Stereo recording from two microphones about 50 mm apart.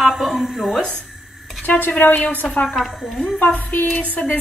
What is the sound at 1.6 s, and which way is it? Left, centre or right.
Speech, left.